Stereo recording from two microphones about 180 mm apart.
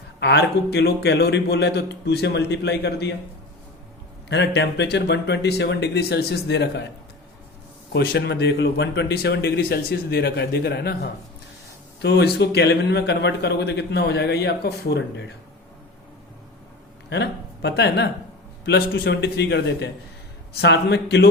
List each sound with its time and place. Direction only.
0.2 s speech: 70° left (ahead or behind)
4.3 s speech: 70° left (ahead or behind)
7.9 s speech: 70° left (ahead or behind)
17.1 s speech: 75° left (ahead or behind)